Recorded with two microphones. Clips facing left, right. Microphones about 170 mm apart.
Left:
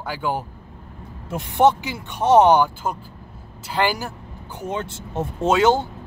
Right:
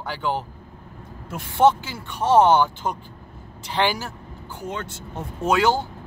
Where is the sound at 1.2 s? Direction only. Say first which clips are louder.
Left 1 dB; 20° left (ahead or behind).